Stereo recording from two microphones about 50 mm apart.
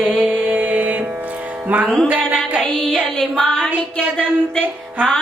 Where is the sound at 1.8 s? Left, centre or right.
Centre.